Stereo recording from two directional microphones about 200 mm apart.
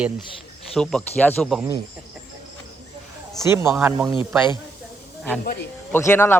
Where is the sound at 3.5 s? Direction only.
10° right (ahead or behind).